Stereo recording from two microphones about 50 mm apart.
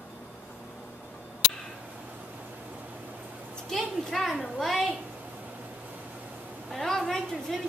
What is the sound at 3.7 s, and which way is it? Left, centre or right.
A child's voice, centre.